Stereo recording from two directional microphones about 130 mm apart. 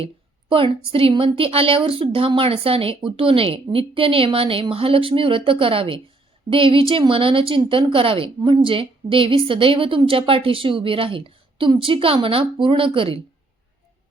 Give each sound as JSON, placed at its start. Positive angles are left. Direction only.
{"t": 0.0, "sound": "a woman's voice", "side_deg": -45}